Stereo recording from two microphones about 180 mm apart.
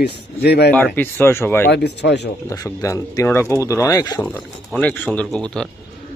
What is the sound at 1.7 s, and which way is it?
Speech, 70° left (ahead or behind).